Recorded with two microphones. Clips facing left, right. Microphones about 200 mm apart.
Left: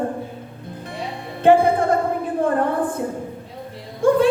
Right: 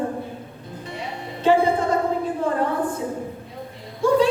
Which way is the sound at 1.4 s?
55° left (ahead or behind).